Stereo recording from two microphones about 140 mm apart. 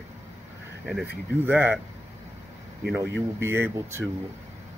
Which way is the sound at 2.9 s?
20° right (ahead or behind).